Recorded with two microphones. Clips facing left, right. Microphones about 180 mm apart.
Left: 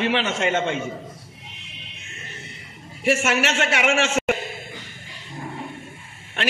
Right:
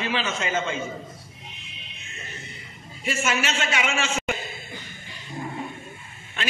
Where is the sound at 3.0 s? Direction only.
70° left (ahead or behind).